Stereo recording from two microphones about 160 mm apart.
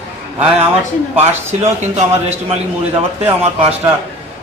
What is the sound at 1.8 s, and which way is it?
Speech, 45° right (ahead or behind).